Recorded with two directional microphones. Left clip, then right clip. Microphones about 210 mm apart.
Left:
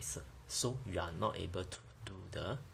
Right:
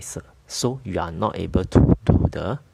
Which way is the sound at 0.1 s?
50° right (ahead or behind).